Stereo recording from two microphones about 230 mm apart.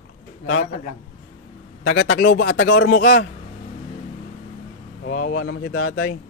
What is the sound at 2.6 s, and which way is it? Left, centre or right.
Speech, left.